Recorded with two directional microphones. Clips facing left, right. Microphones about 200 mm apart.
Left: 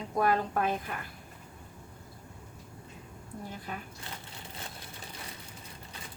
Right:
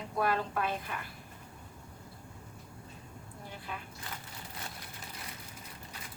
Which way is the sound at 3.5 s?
45° left (ahead or behind).